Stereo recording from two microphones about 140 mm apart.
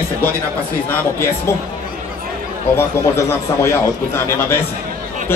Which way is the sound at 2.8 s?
20° left (ahead or behind).